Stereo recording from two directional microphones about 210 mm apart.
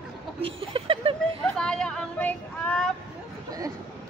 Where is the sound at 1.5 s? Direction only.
5° left (ahead or behind).